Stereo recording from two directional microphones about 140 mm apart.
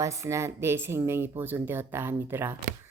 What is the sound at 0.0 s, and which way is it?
A woman's voice, 20° right (ahead or behind).